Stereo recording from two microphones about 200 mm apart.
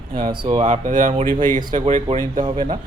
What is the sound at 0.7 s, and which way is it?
Speech, 40° right (ahead or behind).